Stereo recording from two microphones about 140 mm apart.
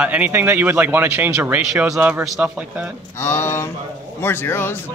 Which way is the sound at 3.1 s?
20° left (ahead or behind).